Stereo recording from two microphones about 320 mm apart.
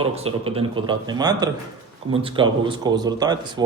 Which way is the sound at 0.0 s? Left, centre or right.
Centre.